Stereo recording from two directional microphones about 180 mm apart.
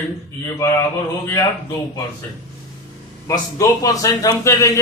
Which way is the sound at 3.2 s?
20° left (ahead or behind).